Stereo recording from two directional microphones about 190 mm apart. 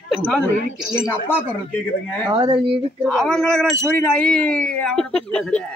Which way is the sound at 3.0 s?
5° left (ahead or behind).